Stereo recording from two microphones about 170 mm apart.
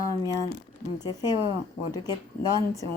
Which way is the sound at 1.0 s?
25° left (ahead or behind).